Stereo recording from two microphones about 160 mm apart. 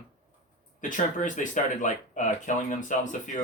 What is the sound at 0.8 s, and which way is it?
Speech, 55° left (ahead or behind).